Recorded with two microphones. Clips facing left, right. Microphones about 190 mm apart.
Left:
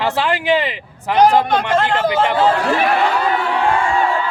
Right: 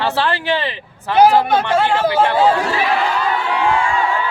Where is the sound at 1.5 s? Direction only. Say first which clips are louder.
Right 1 dB; 10° right (ahead or behind).